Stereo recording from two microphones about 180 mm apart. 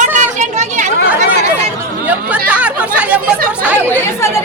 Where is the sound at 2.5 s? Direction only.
10° right (ahead or behind).